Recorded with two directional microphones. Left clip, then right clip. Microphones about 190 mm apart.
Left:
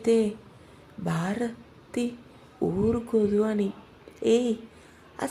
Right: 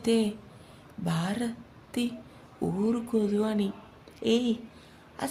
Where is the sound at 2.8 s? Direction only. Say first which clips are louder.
Left 4 dB; 15° left (ahead or behind).